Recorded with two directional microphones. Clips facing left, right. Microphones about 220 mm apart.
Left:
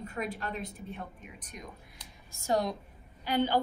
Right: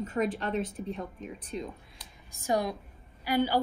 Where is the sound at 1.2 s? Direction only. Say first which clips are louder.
Right 10 dB; 30° right (ahead or behind).